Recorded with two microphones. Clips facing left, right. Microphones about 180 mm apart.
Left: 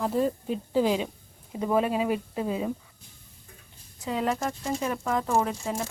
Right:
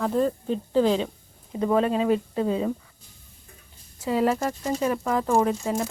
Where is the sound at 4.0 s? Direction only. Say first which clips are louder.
Right 5 dB; 5° right (ahead or behind).